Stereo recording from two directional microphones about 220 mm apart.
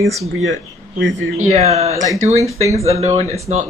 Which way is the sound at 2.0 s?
15° right (ahead or behind).